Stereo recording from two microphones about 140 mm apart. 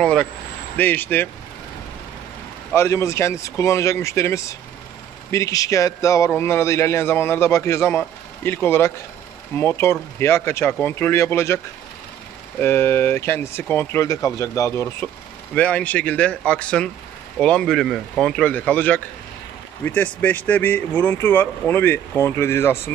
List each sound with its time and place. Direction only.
0.0 s speech: 5° left (ahead or behind)
2.7 s a man's voice: 20° left (ahead or behind)
15.5 s speech: 10° left (ahead or behind)